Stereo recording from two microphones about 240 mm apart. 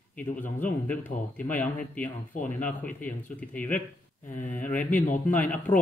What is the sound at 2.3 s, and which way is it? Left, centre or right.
Speech, left.